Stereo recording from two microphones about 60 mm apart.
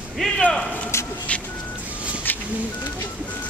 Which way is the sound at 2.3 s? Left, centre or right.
Left.